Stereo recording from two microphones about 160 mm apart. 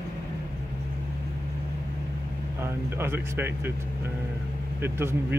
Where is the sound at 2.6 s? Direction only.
15° right (ahead or behind).